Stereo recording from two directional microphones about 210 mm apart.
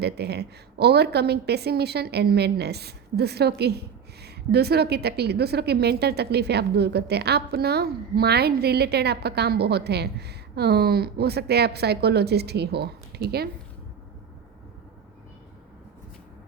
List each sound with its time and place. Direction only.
0.0 s a woman's voice: 50° right (ahead or behind)